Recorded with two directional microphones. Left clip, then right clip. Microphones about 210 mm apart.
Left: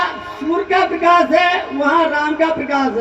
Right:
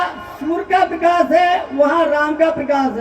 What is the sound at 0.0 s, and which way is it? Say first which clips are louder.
A man's voice: left 1 dB; 50° right (ahead or behind).